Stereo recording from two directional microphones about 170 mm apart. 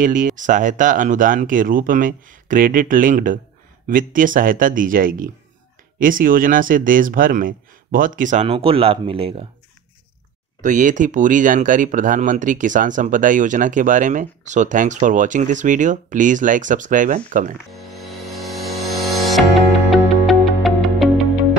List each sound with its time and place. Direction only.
0.0 s speech: 50° right (ahead or behind); by 9.3 s 35° right (ahead or behind)
10.6 s speech: 50° right (ahead or behind)
18.5 s a sound: centre (ahead or behind)
18.9 s music: centre (ahead or behind)